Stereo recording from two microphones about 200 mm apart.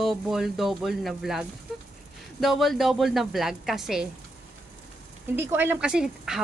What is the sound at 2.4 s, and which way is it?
Speech, centre (ahead or behind).